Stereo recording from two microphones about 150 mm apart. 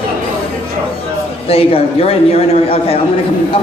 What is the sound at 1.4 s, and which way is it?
A man's voice, 40° left (ahead or behind).